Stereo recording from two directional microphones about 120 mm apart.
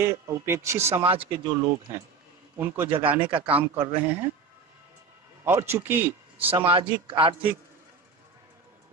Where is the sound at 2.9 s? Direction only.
50° right (ahead or behind).